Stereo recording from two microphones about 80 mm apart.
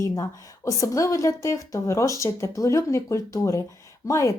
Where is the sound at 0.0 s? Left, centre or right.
Left.